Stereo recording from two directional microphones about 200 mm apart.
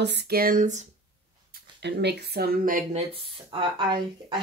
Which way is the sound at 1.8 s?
55° right (ahead or behind).